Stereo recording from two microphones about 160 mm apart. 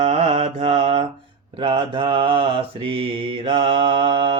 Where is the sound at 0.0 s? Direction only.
40° right (ahead or behind).